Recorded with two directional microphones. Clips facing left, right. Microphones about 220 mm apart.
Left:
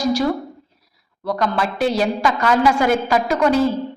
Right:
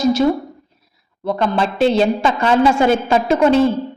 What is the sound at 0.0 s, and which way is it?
A woman's voice, 20° right (ahead or behind).